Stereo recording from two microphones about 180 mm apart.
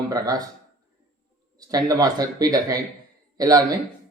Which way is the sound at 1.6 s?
20° right (ahead or behind).